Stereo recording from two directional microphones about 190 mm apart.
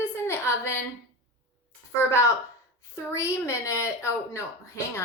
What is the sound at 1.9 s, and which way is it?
A woman's voice, 15° left (ahead or behind).